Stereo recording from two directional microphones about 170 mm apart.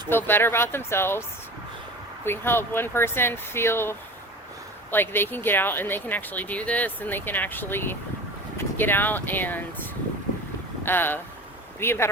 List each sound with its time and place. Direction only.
0.1 s speech: 10° left (ahead or behind)
2.2 s speech: 15° left (ahead or behind)
10.8 s speech: 10° left (ahead or behind)